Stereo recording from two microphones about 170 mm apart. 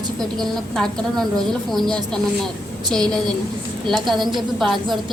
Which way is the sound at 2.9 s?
5° left (ahead or behind).